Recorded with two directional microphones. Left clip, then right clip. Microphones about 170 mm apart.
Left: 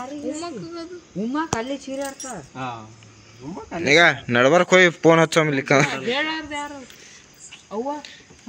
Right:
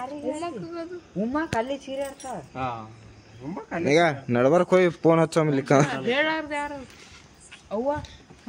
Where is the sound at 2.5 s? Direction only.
20° left (ahead or behind).